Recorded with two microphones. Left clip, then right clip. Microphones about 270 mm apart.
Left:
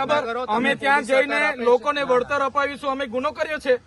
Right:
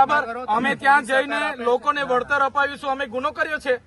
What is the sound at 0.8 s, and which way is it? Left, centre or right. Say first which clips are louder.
Speech: right 2 dB; centre.